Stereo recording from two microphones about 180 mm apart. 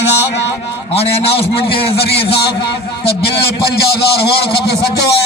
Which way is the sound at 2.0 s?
65° left (ahead or behind).